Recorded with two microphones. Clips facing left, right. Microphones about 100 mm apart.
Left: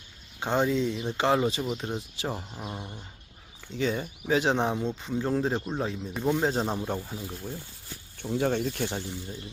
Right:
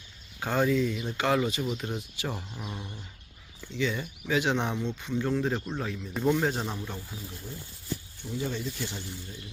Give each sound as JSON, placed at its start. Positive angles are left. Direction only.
{"t": 0.3, "sound": "speech", "side_deg": 25}
{"t": 3.7, "sound": "speech", "side_deg": 40}
{"t": 8.2, "sound": "speech", "side_deg": 65}